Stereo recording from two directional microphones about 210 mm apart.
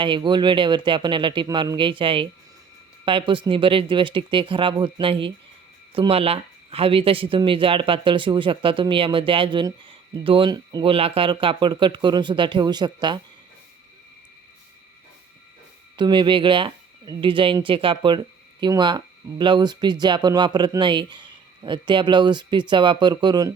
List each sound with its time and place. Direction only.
0.0 s speech: 25° right (ahead or behind)
16.0 s speech: 20° right (ahead or behind)